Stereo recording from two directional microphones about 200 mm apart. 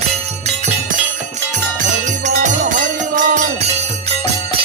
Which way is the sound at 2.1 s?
40° right (ahead or behind).